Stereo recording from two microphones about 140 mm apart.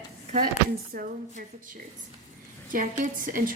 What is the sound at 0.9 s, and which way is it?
Speech, 90° right.